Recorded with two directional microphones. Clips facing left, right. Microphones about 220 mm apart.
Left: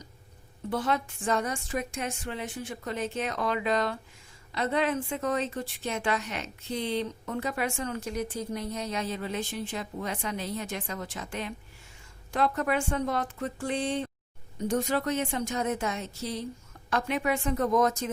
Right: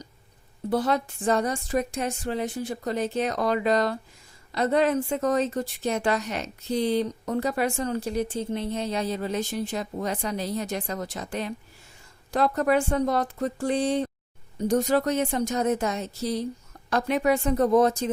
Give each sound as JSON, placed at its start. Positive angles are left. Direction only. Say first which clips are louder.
{"t": 0.7, "sound": "a woman's voice", "louder": "right 5 dB", "side_deg": -40}